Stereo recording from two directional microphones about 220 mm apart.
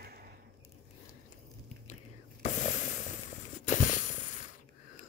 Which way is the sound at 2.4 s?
35° left (ahead or behind).